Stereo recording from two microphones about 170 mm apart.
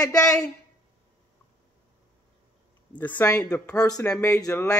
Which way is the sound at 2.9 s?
10° left (ahead or behind).